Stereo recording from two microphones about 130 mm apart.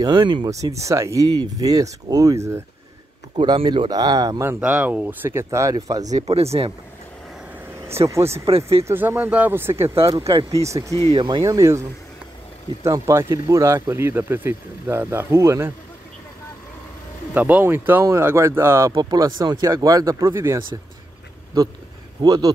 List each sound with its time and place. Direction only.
0.0 s speech: 30° right (ahead or behind)
0.5 s speech: 25° right (ahead or behind)
3.3 s speech: 35° right (ahead or behind)
4.5 s speech: 10° right (ahead or behind); by 6.0 s 25° right (ahead or behind)
6.0 s speech: 60° right (ahead or behind)
8.1 s speech: 20° right (ahead or behind)
8.5 s speech: 50° right (ahead or behind)
8.8 s speech: 15° right (ahead or behind)
12.8 s speech: 20° right (ahead or behind)
17.3 s speech: 10° right (ahead or behind)
22.2 s speech: 30° right (ahead or behind)